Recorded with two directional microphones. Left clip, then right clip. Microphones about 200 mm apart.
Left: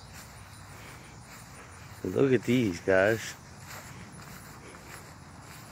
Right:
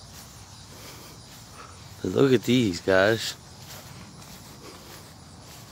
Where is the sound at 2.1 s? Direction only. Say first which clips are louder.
Right 4 dB; 25° right (ahead or behind).